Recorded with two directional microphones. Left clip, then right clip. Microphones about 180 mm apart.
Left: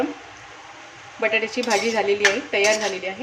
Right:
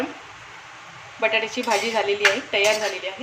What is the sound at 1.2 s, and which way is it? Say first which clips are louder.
Speech: even; 30° left (ahead or behind).